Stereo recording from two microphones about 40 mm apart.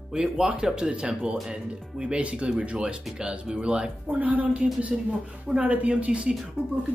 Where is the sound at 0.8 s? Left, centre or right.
Right.